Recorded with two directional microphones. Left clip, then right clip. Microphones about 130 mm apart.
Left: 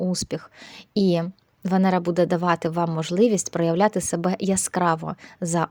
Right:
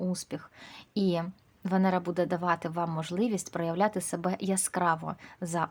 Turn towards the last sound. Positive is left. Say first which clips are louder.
# left 7 dB
turn(degrees=45)  # may be behind; listen again after turning